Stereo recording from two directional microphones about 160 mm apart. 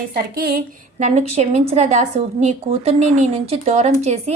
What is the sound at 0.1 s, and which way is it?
A woman's voice, 70° right (ahead or behind).